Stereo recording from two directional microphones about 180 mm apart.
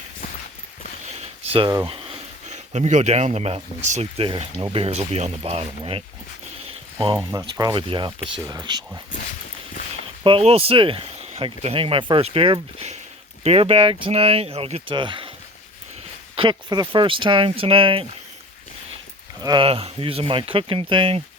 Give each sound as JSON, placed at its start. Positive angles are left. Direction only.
{"t": 1.0, "sound": "a sound", "side_deg": -35}
{"t": 1.7, "sound": "speech", "side_deg": -30}
{"t": 6.7, "sound": "a sound", "side_deg": -30}
{"t": 7.3, "sound": "speech", "side_deg": -20}
{"t": 10.2, "sound": "speech", "side_deg": -30}
{"t": 16.3, "sound": "speech", "side_deg": -25}
{"t": 19.4, "sound": "speech", "side_deg": -25}